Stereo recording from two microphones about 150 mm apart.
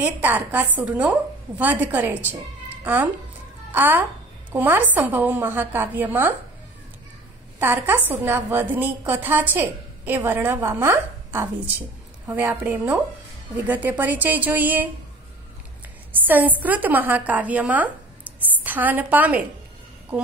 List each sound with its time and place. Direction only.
0.0 s a woman's voice: 10° right (ahead or behind)
7.5 s a woman's voice: 15° right (ahead or behind)
16.1 s a woman's voice: 10° right (ahead or behind)